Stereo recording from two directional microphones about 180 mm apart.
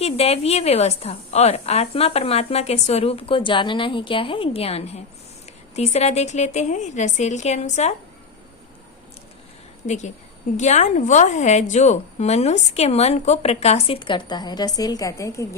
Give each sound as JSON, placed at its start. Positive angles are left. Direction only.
{"t": 0.0, "sound": "a woman's voice", "side_deg": 35}
{"t": 9.8, "sound": "a woman's voice", "side_deg": 40}